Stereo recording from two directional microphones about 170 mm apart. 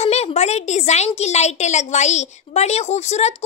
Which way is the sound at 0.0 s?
40° left (ahead or behind).